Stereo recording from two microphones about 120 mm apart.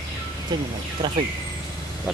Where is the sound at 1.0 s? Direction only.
45° right (ahead or behind).